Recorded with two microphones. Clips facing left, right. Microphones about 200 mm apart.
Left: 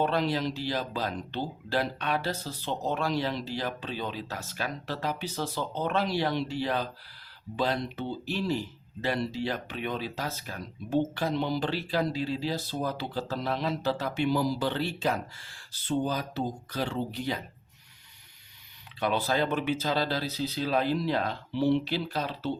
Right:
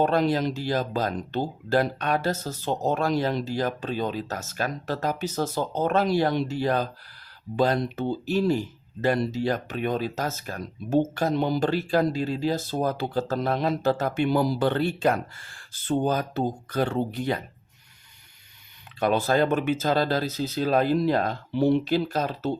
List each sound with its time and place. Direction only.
0.0 s speech: 45° right (ahead or behind)
18.9 s speech: 45° right (ahead or behind)